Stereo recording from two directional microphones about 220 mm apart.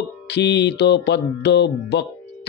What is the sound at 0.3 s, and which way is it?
Mantra, 50° left (ahead or behind).